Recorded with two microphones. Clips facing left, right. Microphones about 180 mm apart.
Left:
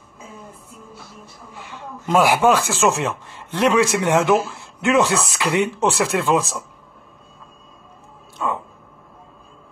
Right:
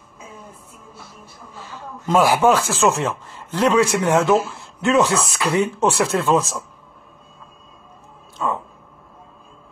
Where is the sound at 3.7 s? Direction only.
30° right (ahead or behind).